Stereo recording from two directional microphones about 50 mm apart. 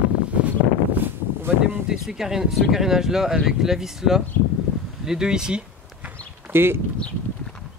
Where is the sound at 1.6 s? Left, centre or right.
Centre.